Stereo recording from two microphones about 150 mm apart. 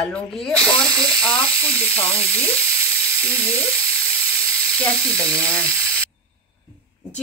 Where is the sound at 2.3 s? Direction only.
15° right (ahead or behind).